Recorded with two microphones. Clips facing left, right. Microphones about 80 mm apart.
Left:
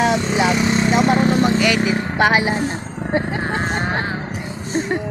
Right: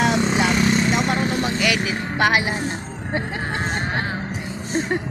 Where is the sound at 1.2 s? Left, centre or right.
Left.